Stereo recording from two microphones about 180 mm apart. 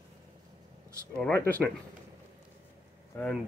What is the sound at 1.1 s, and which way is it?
Speech, 10° left (ahead or behind).